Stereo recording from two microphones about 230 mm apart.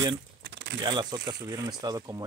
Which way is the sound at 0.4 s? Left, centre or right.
Right.